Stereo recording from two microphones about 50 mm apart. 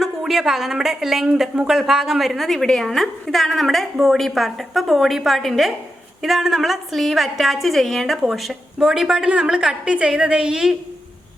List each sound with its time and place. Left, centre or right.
0.0 s a woman's voice: centre